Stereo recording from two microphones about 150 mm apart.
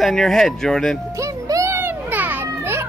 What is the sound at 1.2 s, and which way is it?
Children playing, 20° right (ahead or behind).